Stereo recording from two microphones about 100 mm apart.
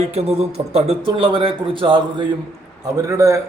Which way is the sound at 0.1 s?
90° right.